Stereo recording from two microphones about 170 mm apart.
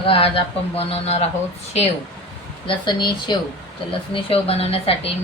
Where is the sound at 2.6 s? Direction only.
25° left (ahead or behind).